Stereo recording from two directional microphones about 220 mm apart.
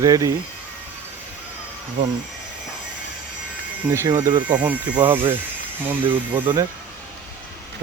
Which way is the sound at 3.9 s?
15° right (ahead or behind).